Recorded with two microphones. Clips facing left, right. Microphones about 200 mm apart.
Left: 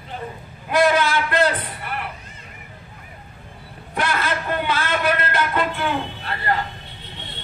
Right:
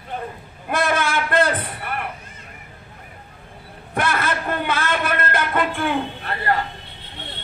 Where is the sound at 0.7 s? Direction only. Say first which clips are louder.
Left 4 dB; 50° right (ahead or behind).